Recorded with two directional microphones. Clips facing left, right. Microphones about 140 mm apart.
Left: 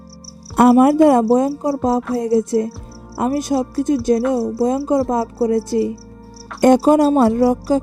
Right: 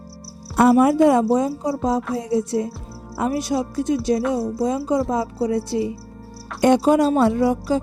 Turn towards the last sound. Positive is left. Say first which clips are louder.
# left 4 dB
turn(degrees=45)  # may be behind; listen again after turning